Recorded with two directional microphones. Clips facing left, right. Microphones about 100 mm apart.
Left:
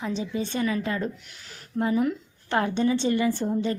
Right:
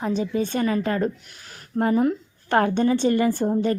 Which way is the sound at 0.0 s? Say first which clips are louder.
Right 5 dB; 45° right (ahead or behind).